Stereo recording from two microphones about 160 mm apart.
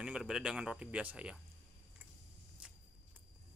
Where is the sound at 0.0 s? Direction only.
5° right (ahead or behind).